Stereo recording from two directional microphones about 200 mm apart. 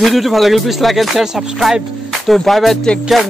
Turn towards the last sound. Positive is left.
turn(degrees=0)  # may be behind; listen again after turning